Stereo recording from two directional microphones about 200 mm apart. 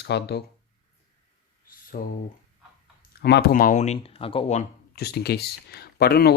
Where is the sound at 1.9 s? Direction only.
40° left (ahead or behind).